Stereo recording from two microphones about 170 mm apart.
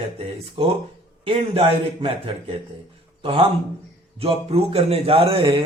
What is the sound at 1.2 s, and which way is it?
Speech, 35° right (ahead or behind).